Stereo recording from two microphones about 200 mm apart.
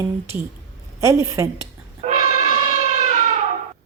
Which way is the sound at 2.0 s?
35° right (ahead or behind).